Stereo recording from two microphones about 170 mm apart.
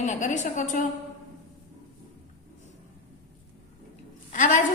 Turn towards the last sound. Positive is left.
turn(degrees=45)  # may be behind; listen again after turning